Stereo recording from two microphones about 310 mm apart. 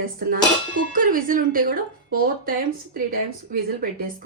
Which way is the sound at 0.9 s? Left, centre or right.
Right.